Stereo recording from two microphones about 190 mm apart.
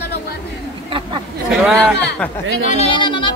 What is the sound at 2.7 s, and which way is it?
Speech, 25° left (ahead or behind).